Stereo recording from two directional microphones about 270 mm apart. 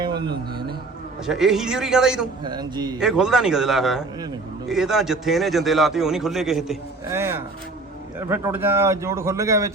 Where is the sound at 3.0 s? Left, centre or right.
Centre.